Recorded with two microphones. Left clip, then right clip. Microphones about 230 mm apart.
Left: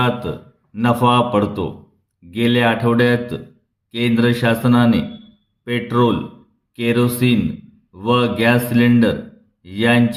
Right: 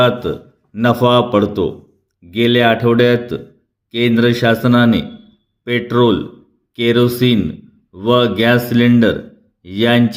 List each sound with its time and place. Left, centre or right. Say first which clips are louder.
0.0 s speech: right 6 dB; centre